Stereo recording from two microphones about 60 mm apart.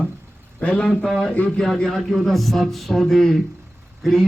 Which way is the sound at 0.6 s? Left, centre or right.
Left.